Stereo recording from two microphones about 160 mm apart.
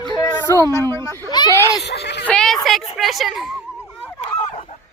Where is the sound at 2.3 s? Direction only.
5° left (ahead or behind).